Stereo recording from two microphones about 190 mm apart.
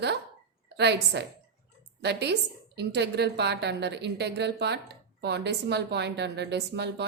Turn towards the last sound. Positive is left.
turn(degrees=-60)  # may be behind; listen again after turning